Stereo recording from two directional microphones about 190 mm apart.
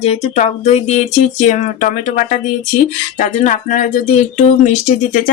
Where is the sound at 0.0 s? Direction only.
35° left (ahead or behind).